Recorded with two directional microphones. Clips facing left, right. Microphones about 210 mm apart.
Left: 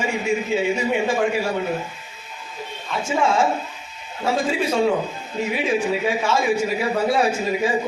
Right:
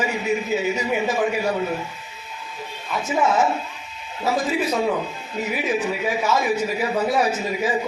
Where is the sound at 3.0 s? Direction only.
30° left (ahead or behind).